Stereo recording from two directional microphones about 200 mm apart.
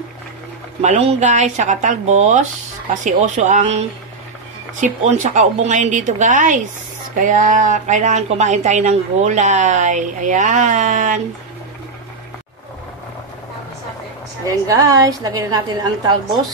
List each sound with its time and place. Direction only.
0.8 s speech: 35° right (ahead or behind)
14.4 s a woman's voice: 15° right (ahead or behind)